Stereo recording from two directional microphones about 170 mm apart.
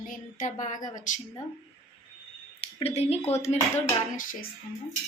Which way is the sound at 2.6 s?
35° left (ahead or behind).